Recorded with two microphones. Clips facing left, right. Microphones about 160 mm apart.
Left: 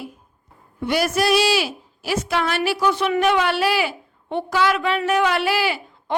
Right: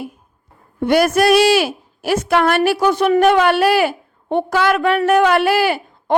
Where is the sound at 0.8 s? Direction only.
50° right (ahead or behind).